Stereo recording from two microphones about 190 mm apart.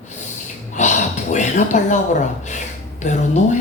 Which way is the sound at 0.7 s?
40° left (ahead or behind).